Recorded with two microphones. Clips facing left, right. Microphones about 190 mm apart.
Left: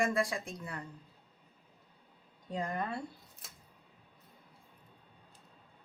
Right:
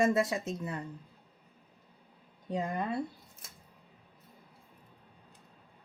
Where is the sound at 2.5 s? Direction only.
20° right (ahead or behind).